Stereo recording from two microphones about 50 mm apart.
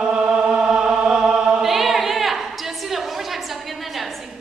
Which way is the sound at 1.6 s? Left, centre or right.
Centre.